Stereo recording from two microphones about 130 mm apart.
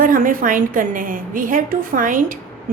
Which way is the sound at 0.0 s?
90° right.